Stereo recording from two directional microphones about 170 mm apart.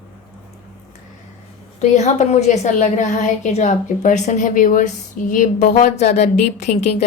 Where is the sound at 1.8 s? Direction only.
45° left (ahead or behind).